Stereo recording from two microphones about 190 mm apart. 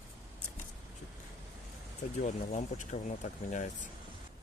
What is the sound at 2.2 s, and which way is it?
Speech, 40° left (ahead or behind).